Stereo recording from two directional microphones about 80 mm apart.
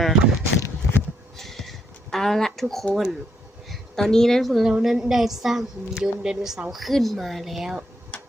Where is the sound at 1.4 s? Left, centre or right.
Centre.